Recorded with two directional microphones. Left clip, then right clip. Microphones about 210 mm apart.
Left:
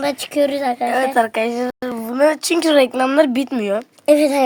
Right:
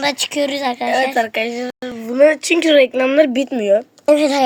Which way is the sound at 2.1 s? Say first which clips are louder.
Right 4 dB; 15° left (ahead or behind).